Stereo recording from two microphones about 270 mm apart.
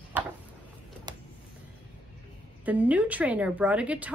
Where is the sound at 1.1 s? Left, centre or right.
Centre.